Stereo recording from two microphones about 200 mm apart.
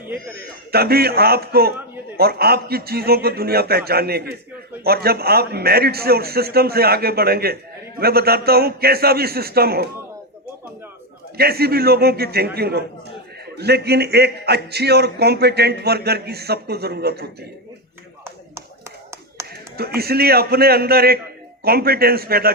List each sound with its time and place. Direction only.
0.7 s a man's voice: 50° right (ahead or behind)
11.3 s a man's voice: 50° right (ahead or behind)
19.4 s clapping: 15° right (ahead or behind)
19.7 s a man's voice: 50° right (ahead or behind)